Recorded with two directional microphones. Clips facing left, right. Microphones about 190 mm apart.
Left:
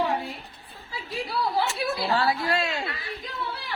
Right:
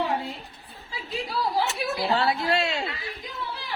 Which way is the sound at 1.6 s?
20° right (ahead or behind).